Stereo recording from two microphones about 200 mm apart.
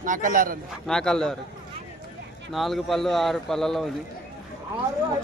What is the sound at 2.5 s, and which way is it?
Speech, centre (ahead or behind).